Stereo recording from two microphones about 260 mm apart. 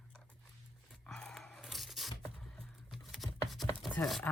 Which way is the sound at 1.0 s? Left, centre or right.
Centre.